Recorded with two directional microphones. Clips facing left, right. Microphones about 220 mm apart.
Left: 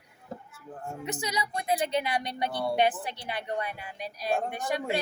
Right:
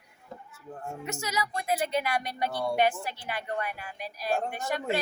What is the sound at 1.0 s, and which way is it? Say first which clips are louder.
A woman's voice: even; 15° left (ahead or behind).